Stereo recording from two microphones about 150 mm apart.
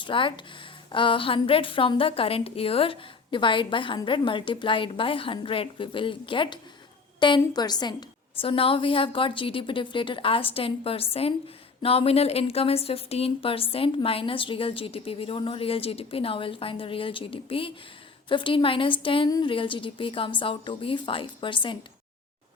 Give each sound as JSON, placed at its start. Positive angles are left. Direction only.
{"t": 0.0, "sound": "a woman's voice", "side_deg": 35}
{"t": 8.4, "sound": "a woman's voice", "side_deg": 40}